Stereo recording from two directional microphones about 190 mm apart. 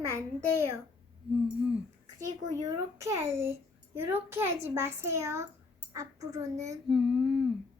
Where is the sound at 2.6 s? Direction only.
20° right (ahead or behind).